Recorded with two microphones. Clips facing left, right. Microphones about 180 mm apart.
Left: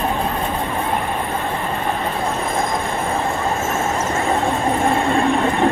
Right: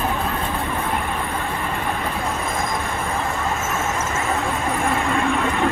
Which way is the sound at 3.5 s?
35° left (ahead or behind).